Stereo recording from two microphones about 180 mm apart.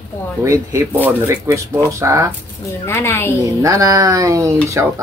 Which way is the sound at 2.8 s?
15° left (ahead or behind).